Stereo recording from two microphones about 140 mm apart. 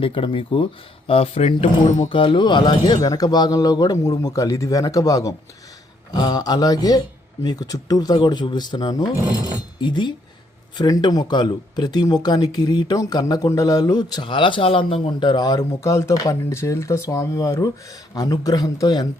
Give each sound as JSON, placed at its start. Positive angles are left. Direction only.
{"t": 0.0, "sound": "speech", "side_deg": 40}